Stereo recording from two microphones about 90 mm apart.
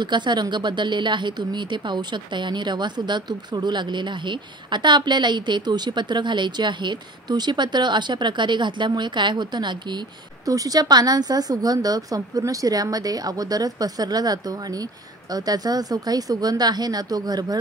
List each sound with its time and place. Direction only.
0.0 s a woman's voice: 55° right (ahead or behind)
10.4 s a woman's voice: 40° right (ahead or behind)